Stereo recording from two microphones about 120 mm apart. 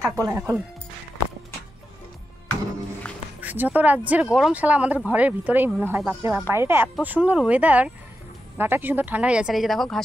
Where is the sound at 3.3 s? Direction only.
15° right (ahead or behind).